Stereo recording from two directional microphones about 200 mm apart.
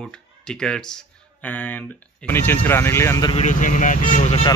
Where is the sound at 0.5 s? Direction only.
5° left (ahead or behind).